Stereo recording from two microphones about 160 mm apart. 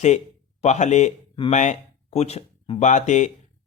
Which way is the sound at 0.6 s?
45° left (ahead or behind).